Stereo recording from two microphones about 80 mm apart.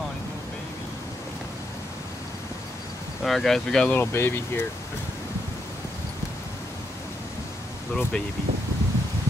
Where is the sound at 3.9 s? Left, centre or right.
Left.